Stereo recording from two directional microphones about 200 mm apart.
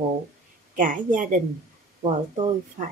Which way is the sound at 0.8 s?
40° right (ahead or behind).